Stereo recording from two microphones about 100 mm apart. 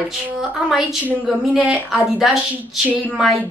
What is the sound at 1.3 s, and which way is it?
A woman's voice, centre (ahead or behind).